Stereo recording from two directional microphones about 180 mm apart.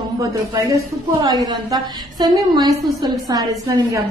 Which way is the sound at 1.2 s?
20° right (ahead or behind).